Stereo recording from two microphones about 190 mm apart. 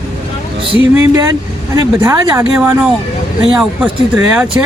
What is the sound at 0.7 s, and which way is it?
Speech, 15° right (ahead or behind).